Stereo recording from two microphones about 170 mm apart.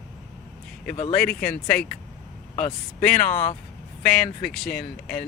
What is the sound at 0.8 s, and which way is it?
Speech, 55° left (ahead or behind).